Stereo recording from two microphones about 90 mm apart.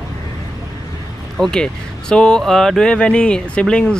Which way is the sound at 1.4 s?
10° left (ahead or behind).